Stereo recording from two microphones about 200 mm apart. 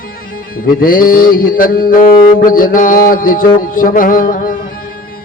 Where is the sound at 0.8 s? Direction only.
45° left (ahead or behind).